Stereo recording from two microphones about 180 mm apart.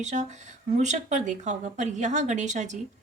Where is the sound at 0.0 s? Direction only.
40° right (ahead or behind).